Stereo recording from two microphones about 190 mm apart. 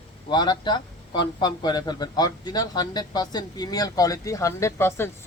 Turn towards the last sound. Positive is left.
turn(degrees=15)  # may be behind; listen again after turning